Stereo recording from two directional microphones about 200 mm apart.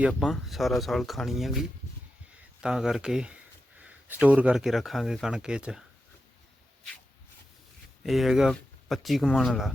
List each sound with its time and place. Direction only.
0.1 s speech: centre (ahead or behind)
2.6 s speech: 5° right (ahead or behind)
8.0 s speech: centre (ahead or behind)